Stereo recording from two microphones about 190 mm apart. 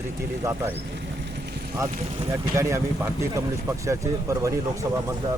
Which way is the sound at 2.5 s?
15° right (ahead or behind).